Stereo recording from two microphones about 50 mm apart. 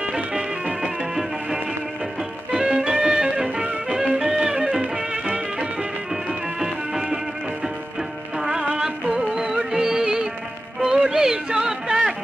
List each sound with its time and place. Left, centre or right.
0.0 s music: centre
2.5 s music: centre
6.6 s music: centre
8.4 s music: centre